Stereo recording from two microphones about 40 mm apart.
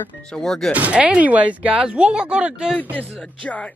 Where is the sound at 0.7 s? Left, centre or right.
Right.